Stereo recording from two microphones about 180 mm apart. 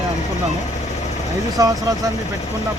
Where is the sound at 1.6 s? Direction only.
20° right (ahead or behind).